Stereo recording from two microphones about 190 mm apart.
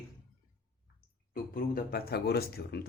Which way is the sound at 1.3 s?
50° left (ahead or behind).